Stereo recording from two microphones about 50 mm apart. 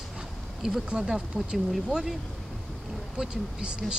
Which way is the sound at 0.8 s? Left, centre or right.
Centre.